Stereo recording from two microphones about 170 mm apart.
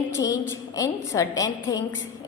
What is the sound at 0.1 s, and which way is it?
A woman's voice, 20° left (ahead or behind).